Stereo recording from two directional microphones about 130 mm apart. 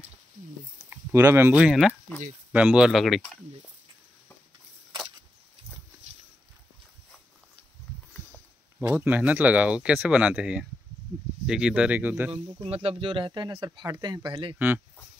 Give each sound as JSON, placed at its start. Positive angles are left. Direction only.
{"t": 0.8, "sound": "speech", "side_deg": -20}
{"t": 8.8, "sound": "speech", "side_deg": -15}
{"t": 12.6, "sound": "speech", "side_deg": -50}